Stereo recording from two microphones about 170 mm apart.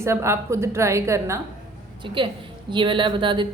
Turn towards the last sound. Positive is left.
turn(degrees=-30)  # may be behind; listen again after turning